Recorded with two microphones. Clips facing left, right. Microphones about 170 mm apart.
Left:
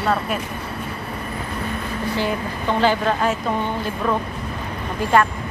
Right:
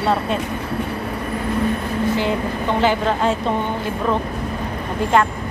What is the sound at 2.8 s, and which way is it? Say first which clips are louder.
Speech: even; 20° right (ahead or behind).